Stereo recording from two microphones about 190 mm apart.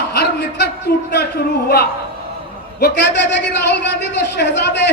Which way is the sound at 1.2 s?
60° left (ahead or behind).